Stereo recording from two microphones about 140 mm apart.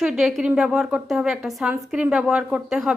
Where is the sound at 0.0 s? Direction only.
5° right (ahead or behind).